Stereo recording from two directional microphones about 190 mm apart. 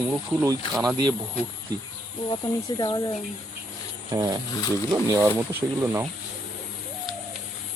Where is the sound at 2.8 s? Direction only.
20° left (ahead or behind).